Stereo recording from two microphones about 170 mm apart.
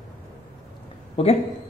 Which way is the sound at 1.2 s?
35° left (ahead or behind).